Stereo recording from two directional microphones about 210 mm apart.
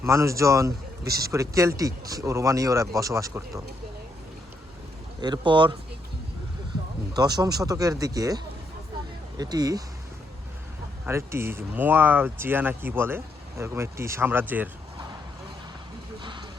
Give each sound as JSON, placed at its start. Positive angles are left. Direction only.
{"t": 0.0, "sound": "speech", "side_deg": -15}
{"t": 5.2, "sound": "speech", "side_deg": -20}
{"t": 7.1, "sound": "speech", "side_deg": -20}
{"t": 9.4, "sound": "speech", "side_deg": -20}
{"t": 11.0, "sound": "speech", "side_deg": -10}